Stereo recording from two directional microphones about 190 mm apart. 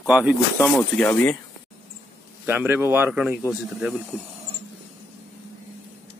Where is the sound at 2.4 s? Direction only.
10° right (ahead or behind).